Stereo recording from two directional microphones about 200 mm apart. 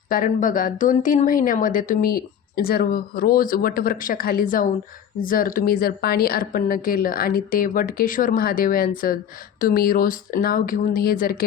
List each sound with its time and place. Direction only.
0.1 s speech: 40° left (ahead or behind)